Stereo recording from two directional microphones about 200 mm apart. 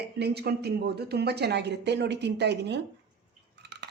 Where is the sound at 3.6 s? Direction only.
60° right (ahead or behind).